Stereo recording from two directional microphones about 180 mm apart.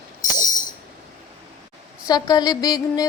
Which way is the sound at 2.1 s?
20° left (ahead or behind).